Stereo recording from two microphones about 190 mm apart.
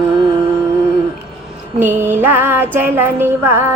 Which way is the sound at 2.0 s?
10° right (ahead or behind).